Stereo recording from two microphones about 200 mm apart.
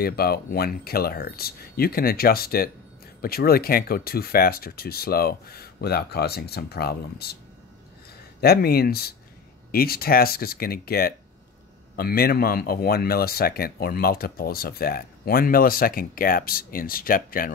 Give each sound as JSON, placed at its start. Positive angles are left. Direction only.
{"t": 0.0, "sound": "speech", "side_deg": 50}
{"t": 8.4, "sound": "speech", "side_deg": 50}